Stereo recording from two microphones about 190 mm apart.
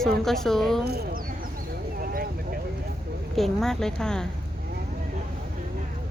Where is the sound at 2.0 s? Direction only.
50° right (ahead or behind).